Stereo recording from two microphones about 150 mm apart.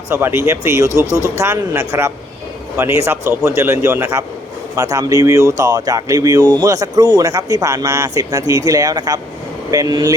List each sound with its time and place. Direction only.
0.1 s a man's voice: 15° right (ahead or behind)